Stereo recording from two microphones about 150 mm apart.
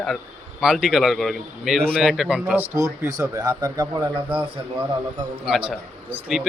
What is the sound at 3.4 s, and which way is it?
A man's voice, 30° right (ahead or behind).